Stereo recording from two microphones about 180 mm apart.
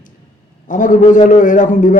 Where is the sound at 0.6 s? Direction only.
45° left (ahead or behind).